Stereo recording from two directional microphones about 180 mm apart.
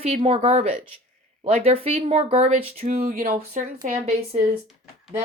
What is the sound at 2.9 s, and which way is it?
Speech, 55° right (ahead or behind).